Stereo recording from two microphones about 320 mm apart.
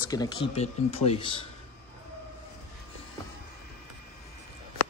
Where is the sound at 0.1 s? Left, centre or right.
Centre.